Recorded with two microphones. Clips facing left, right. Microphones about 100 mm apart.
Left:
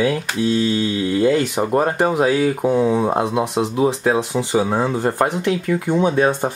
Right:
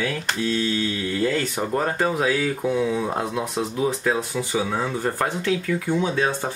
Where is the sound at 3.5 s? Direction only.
70° left (ahead or behind).